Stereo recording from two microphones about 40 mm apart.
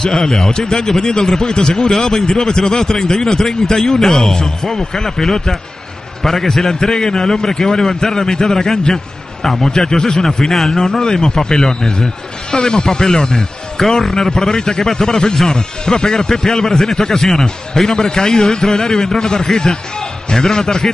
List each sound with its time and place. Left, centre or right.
0.0 s a man's voice: centre
9.7 s a man's voice: centre